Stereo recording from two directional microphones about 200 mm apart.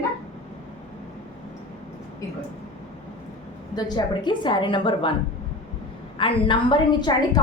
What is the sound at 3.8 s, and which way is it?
A woman's voice, 20° left (ahead or behind).